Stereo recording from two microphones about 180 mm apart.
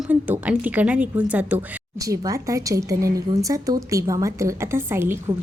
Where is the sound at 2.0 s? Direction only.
20° right (ahead or behind).